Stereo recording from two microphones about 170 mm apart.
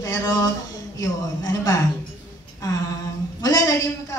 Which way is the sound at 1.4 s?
20° left (ahead or behind).